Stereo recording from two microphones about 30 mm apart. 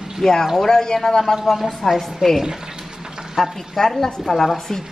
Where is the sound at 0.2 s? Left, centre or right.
Centre.